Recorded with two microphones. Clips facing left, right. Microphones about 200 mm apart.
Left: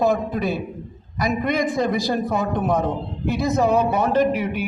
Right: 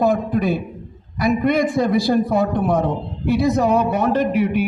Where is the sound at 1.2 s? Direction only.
45° left (ahead or behind).